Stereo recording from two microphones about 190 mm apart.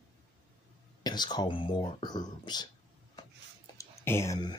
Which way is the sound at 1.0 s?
20° left (ahead or behind).